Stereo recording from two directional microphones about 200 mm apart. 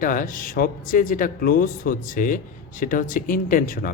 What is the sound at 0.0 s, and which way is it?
Speech, 40° left (ahead or behind).